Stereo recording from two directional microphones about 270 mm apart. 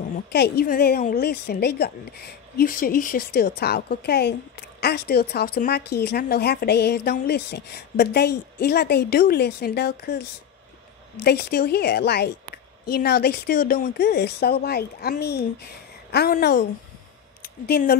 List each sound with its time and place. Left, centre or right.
0.3 s a woman's voice: left
11.2 s a woman's voice: left